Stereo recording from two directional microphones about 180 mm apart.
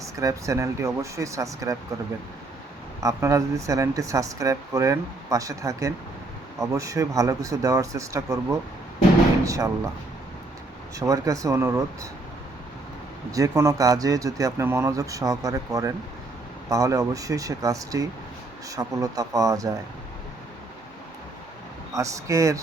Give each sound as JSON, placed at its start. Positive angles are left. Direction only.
{"t": 0.0, "sound": "speech", "side_deg": -20}
{"t": 3.0, "sound": "speech", "side_deg": -15}
{"t": 11.0, "sound": "speech", "side_deg": -20}
{"t": 13.3, "sound": "speech", "side_deg": -15}
{"t": 21.9, "sound": "speech", "side_deg": -15}